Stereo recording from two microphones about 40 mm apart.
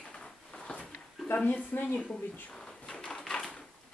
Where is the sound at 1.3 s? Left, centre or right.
Left.